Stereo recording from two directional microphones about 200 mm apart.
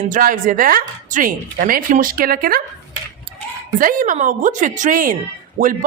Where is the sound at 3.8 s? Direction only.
45° right (ahead or behind).